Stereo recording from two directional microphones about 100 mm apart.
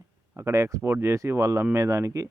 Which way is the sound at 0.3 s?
30° right (ahead or behind).